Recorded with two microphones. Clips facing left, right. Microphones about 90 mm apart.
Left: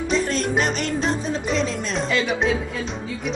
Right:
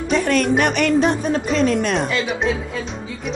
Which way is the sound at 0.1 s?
65° right (ahead or behind).